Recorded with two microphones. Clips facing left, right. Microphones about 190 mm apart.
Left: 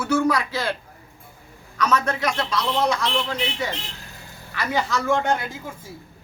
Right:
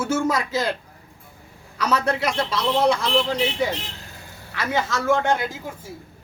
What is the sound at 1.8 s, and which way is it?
Speech, 30° right (ahead or behind).